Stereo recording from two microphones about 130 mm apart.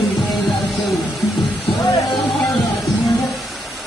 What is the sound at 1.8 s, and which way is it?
Music, 30° left (ahead or behind).